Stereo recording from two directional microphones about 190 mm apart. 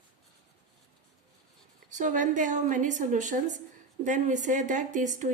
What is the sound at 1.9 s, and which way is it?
A woman's voice, 40° right (ahead or behind).